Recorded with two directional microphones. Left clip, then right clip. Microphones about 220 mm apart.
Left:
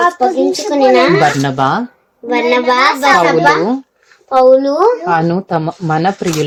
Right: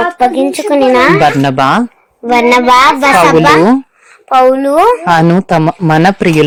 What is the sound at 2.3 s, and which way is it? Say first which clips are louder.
Speech: right 5 dB; 25° right (ahead or behind).